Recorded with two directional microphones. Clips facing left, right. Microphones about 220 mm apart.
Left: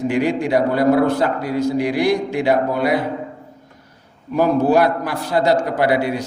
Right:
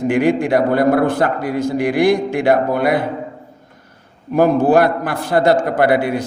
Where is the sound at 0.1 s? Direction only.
55° right (ahead or behind).